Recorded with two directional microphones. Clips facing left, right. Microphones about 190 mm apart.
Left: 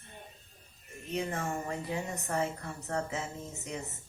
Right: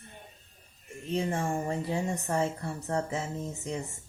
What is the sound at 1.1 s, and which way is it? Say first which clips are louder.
Speech: right 4 dB; 30° right (ahead or behind).